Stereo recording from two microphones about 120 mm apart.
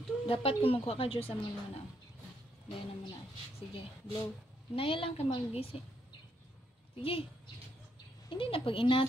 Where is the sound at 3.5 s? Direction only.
50° left (ahead or behind).